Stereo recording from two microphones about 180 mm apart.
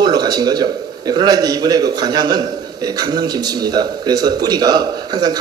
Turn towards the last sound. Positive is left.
turn(degrees=-25)  # may be behind; listen again after turning